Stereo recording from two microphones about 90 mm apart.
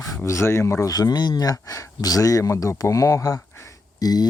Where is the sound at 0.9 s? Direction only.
45° left (ahead or behind).